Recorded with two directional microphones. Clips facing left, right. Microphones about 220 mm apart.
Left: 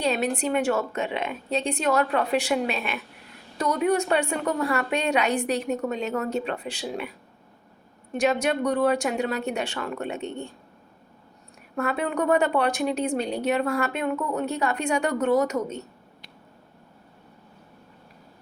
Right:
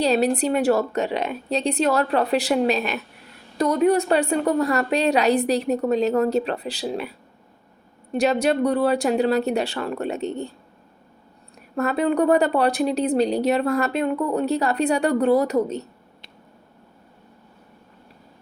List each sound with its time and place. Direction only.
0.0 s speech: 35° right (ahead or behind)
8.1 s speech: 35° right (ahead or behind)
11.8 s speech: 35° right (ahead or behind)